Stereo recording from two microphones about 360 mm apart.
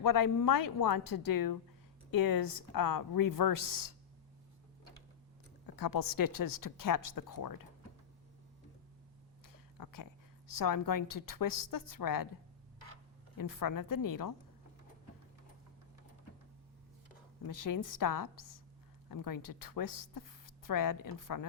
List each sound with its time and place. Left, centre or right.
0.0 s speech: left
5.7 s speech: left
9.5 s a sound: left
10.5 s speech: left
13.3 s speech: left
17.4 s speech: left